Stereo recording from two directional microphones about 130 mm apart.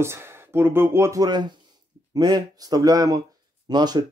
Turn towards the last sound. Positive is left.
turn(degrees=-35)  # may be behind; listen again after turning